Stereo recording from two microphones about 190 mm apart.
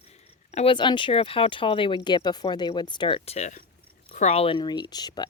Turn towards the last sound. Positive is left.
turn(degrees=20)  # may be behind; listen again after turning